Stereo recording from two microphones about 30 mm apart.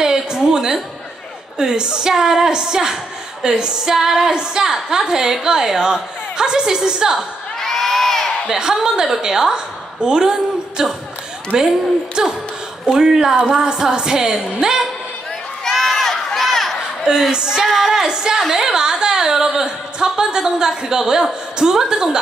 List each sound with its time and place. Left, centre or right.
0.0 s a sound: right
1.6 s a woman's voice: right
3.9 s speech: centre
4.3 s a woman's voice: right
7.5 s crowd: centre
8.5 s a woman's voice: centre
15.6 s crowd: centre
17.3 s a woman's voice: right
17.6 s speech: centre
18.0 s a woman's voice: right